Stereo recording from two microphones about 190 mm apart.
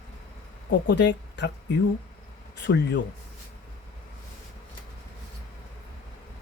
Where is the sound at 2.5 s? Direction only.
65° left (ahead or behind).